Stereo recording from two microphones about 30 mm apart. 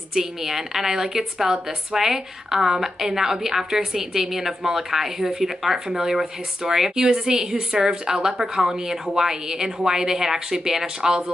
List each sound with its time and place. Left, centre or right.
0.1 s a woman's voice: centre
7.0 s a woman's voice: right